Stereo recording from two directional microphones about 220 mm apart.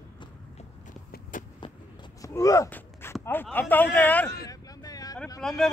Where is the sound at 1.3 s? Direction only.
35° left (ahead or behind).